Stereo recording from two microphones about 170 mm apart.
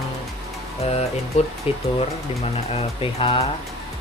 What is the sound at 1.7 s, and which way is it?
Speech, 30° left (ahead or behind).